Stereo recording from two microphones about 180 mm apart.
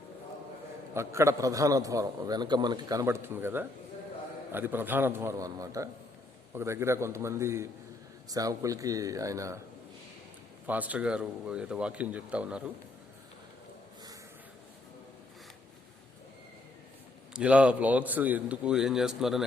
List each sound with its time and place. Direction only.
0.9 s a man's voice: 15° right (ahead or behind)
10.7 s a man's voice: 10° right (ahead or behind)
17.3 s a man's voice: 5° right (ahead or behind)